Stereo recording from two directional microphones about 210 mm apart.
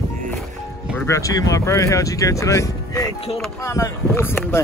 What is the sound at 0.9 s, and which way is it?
Speech, 15° left (ahead or behind).